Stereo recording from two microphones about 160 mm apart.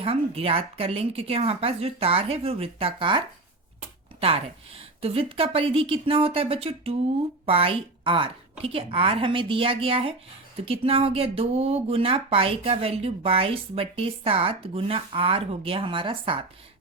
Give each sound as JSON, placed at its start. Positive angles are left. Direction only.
{"t": 0.0, "sound": "speech", "side_deg": -35}